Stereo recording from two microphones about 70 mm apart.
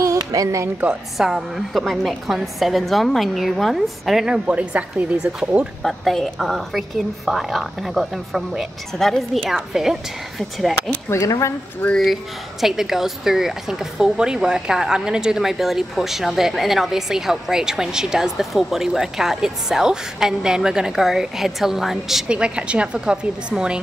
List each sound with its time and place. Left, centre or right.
0.2 s speech: right
1.1 s a woman's voice: centre
4.5 s a woman's voice: centre
5.8 s a woman's voice: centre
11.1 s speech: left
12.0 s a woman's voice: centre
22.3 s a woman's voice: centre